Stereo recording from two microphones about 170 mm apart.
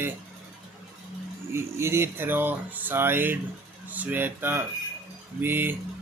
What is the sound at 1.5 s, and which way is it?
Speech, 15° right (ahead or behind).